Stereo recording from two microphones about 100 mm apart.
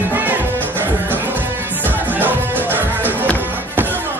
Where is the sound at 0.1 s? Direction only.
20° right (ahead or behind).